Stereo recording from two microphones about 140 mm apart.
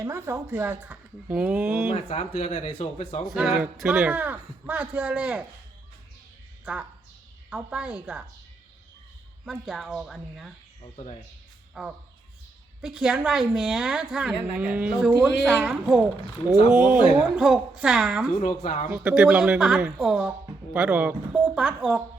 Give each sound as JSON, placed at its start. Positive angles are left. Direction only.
{"t": 0.0, "sound": "speech", "side_deg": -20}
{"t": 2.0, "sound": "speech", "side_deg": 50}
{"t": 3.2, "sound": "speech", "side_deg": -5}
{"t": 7.5, "sound": "speech", "side_deg": -10}
{"t": 9.5, "sound": "a woman's voice", "side_deg": 0}
{"t": 10.9, "sound": "speech", "side_deg": 45}
{"t": 11.7, "sound": "a woman's voice", "side_deg": -5}
{"t": 18.3, "sound": "speech", "side_deg": 60}
{"t": 18.9, "sound": "a woman's voice", "side_deg": -10}